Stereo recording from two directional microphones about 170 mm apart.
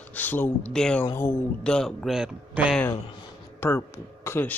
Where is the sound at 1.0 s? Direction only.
15° left (ahead or behind); by 2.7 s 5° right (ahead or behind).